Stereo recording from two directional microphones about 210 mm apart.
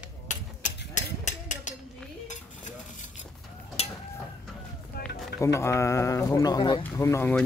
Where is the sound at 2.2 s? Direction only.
35° left (ahead or behind).